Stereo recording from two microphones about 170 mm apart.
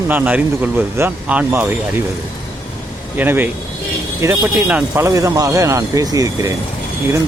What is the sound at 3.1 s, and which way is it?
Speech, 10° right (ahead or behind).